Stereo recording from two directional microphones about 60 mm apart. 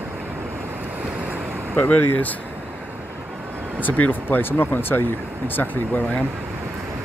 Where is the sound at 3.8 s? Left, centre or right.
Left.